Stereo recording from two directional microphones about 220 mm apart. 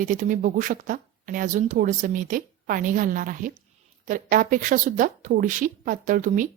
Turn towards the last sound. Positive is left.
turn(degrees=-35)  # may be behind; listen again after turning